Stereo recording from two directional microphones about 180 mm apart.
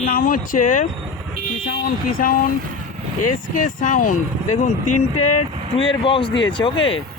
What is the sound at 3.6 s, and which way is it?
Speech, 45° left (ahead or behind).